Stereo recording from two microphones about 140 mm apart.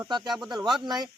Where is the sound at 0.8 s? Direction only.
30° right (ahead or behind).